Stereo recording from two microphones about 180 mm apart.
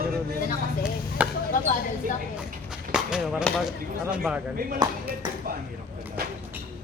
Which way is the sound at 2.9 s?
5° right (ahead or behind).